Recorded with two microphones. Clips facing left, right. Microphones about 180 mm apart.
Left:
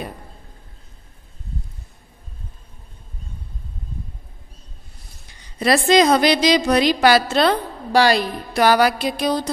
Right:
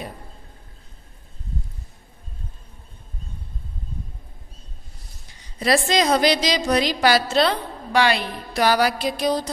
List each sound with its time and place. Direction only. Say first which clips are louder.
5.6 s a woman's voice: left 5 dB; 65° left (ahead or behind)
7.9 s a woman's voice: left 4 dB; 35° left (ahead or behind)
8.5 s a woman's voice: left 3 dB; 60° left (ahead or behind)